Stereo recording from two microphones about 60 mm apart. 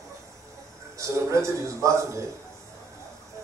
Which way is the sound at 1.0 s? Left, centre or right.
Right.